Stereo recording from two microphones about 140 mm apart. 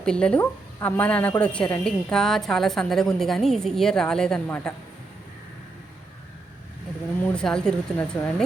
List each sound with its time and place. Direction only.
0.0 s a woman's voice: 5° left (ahead or behind)
7.2 s a woman's voice: 10° left (ahead or behind)
7.9 s speech: 15° left (ahead or behind)